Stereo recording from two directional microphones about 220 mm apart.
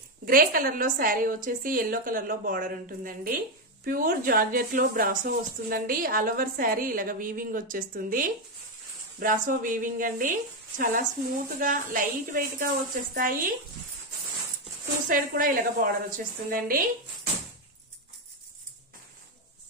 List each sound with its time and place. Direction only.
0.2 s speech: 40° right (ahead or behind)
15.0 s speech: 40° right (ahead or behind)